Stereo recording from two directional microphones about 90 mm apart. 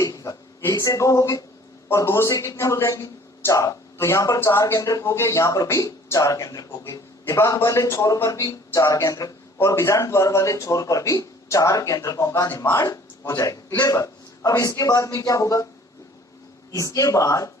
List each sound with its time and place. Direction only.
0.0 s a sound: 40° left (ahead or behind)
0.7 s a man's voice: 35° left (ahead or behind)
16.7 s a man's voice: 40° left (ahead or behind)